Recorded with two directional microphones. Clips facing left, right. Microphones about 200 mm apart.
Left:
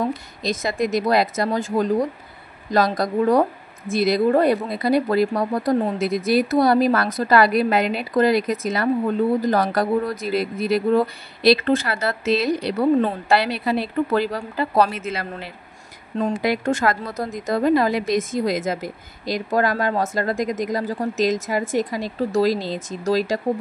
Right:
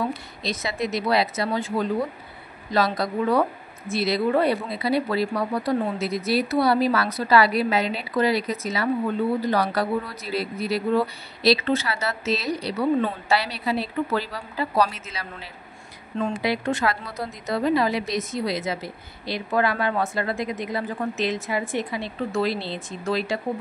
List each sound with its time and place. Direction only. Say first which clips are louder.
0.0 s speech: left 4 dB; 45° left (ahead or behind)
16.2 s speech: left 3 dB; 40° left (ahead or behind)